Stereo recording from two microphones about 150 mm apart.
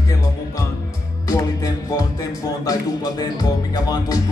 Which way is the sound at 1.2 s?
25° left (ahead or behind).